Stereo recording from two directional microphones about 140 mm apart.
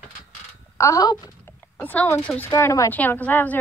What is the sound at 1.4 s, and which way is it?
Speech, 15° left (ahead or behind).